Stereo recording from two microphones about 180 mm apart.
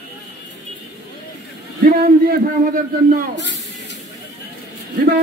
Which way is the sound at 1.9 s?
55° right (ahead or behind).